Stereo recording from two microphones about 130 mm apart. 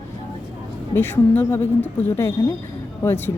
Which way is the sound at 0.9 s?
15° left (ahead or behind).